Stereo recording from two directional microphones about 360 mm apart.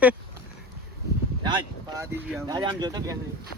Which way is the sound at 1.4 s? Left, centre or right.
Centre.